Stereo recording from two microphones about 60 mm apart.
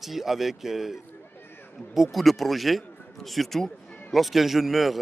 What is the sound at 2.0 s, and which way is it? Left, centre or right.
A man's voice, centre.